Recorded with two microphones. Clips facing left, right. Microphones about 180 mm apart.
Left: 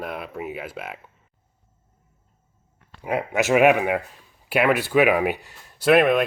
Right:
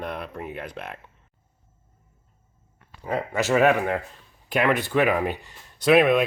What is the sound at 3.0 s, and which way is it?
Speech, 10° left (ahead or behind).